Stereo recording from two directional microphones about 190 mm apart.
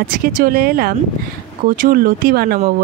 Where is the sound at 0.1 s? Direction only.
45° right (ahead or behind).